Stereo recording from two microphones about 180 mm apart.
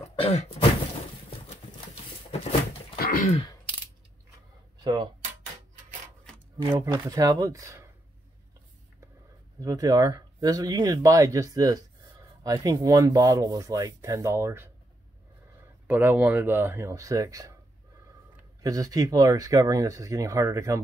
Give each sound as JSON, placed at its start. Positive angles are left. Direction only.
{"t": 0.1, "sound": "throat clearing", "side_deg": 30}
{"t": 3.0, "sound": "throat clearing", "side_deg": 50}
{"t": 4.8, "sound": "speech", "side_deg": -25}
{"t": 6.6, "sound": "speech", "side_deg": -15}
{"t": 9.6, "sound": "speech", "side_deg": -20}
{"t": 15.9, "sound": "speech", "side_deg": -10}
{"t": 18.6, "sound": "speech", "side_deg": -20}